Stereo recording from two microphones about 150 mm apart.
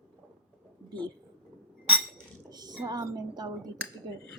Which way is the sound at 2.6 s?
25° right (ahead or behind).